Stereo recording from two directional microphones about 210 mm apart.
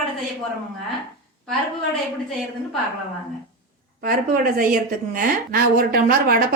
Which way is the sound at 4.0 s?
45° right (ahead or behind).